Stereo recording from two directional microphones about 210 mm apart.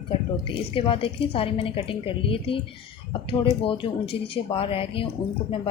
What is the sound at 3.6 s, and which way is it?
A woman's voice, 25° left (ahead or behind).